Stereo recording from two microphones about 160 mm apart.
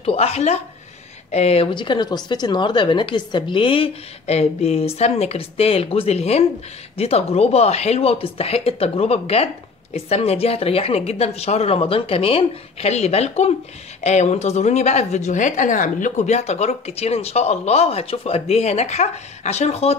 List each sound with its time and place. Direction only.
0.0 s a woman's voice: 40° left (ahead or behind)